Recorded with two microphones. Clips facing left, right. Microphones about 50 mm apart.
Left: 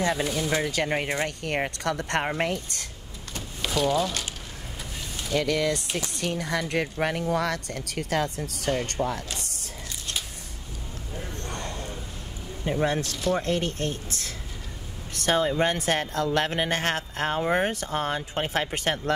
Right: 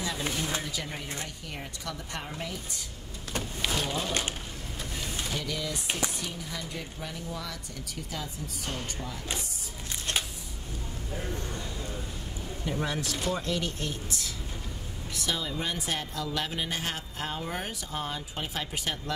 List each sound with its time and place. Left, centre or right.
0.0 s speech: left
3.9 s speech: right
5.3 s speech: left
11.4 s a sound: left
12.8 s speech: left